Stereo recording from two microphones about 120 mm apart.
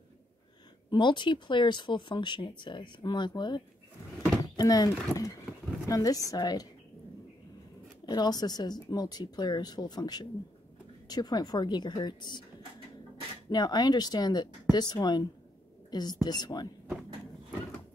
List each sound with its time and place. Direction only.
0.8 s speech: 40° left (ahead or behind)
8.0 s speech: 35° left (ahead or behind)
13.5 s speech: 35° left (ahead or behind)